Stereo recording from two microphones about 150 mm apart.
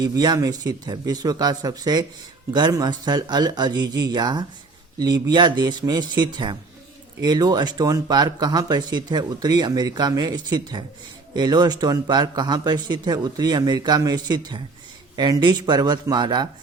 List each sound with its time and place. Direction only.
0.0 s speech: 25° right (ahead or behind)